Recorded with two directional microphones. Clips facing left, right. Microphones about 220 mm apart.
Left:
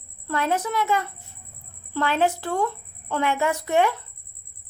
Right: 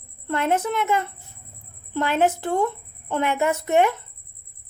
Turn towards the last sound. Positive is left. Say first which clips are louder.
# right 2 dB
turn(degrees=-20)  # may be behind; listen again after turning